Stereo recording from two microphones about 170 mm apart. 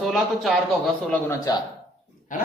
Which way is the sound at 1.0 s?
10° left (ahead or behind).